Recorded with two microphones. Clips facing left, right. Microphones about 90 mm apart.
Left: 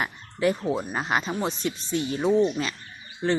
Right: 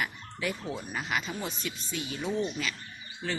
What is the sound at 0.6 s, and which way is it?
Speech, 35° left (ahead or behind).